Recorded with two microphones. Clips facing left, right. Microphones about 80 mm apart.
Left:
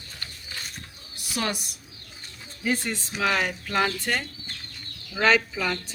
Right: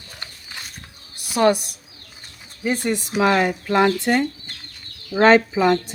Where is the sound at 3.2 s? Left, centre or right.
Right.